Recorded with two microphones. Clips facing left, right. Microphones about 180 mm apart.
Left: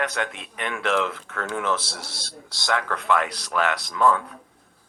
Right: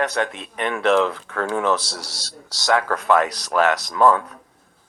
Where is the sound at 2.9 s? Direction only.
45° right (ahead or behind).